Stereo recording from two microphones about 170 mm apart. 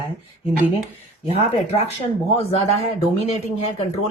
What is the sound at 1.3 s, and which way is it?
A man's voice, 35° left (ahead or behind).